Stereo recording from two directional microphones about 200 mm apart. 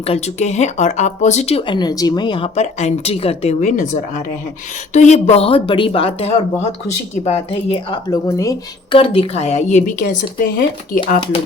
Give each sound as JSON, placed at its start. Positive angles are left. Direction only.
{"t": 0.0, "sound": "speech", "side_deg": 30}
{"t": 9.0, "sound": "speech", "side_deg": 30}